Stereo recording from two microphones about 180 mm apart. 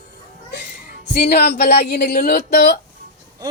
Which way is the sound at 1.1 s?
65° left (ahead or behind).